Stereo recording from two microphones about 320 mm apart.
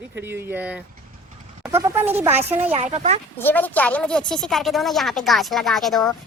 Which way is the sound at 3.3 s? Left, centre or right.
Centre.